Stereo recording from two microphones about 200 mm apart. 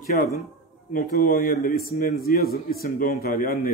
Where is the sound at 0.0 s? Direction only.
50° left (ahead or behind).